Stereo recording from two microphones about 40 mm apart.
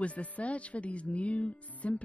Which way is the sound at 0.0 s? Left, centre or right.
Left.